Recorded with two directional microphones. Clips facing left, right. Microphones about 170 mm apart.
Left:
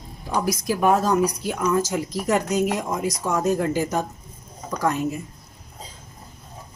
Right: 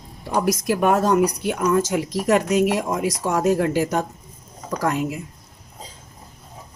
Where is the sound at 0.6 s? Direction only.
65° right (ahead or behind).